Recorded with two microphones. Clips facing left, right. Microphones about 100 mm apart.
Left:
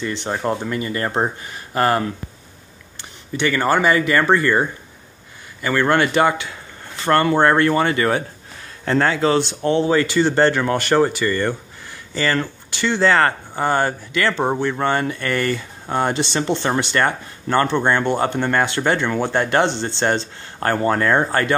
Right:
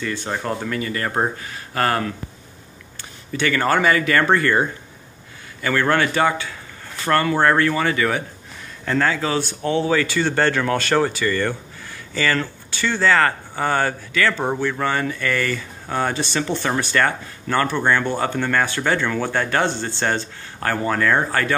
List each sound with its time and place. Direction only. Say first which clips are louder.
0.0 s speech: left 3 dB; 25° left (ahead or behind)
3.3 s speech: left 1 dB; 15° left (ahead or behind)
5.6 s speech: left 2 dB; 20° left (ahead or behind)
9.8 s speech: left 3 dB; 20° left (ahead or behind)